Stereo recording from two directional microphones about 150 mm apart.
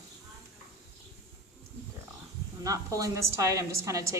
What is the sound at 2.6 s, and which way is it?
A woman's voice, 20° right (ahead or behind).